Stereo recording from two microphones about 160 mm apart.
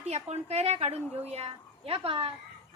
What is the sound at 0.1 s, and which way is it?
A woman's voice, 40° right (ahead or behind).